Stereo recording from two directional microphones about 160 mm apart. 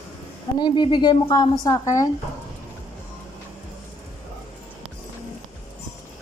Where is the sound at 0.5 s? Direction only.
30° left (ahead or behind).